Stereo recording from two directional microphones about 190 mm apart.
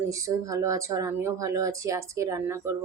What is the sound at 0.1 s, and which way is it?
Speech, 15° right (ahead or behind).